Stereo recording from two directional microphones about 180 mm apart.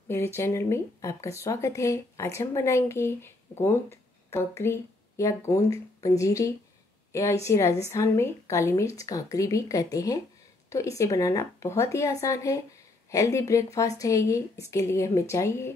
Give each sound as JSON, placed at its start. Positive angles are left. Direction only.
{"t": 0.1, "sound": "speech", "side_deg": 15}